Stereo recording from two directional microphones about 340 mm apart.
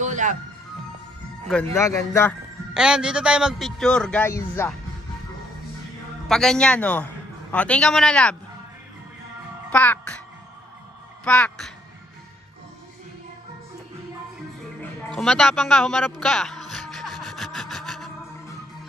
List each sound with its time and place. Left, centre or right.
0.0 s music: right
1.5 s a man's voice: centre
6.2 s a man's voice: centre
9.7 s a child's voice: centre
11.2 s a man's voice: centre
15.1 s a man's voice: centre
16.2 s music: centre